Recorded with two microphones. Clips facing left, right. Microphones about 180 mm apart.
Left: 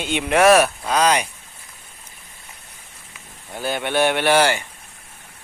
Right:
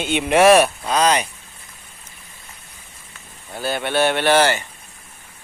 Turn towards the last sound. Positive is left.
turn(degrees=10)  # may be behind; listen again after turning